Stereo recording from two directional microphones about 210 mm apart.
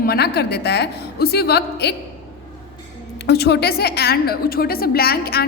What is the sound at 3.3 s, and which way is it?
A woman's voice, 50° left (ahead or behind).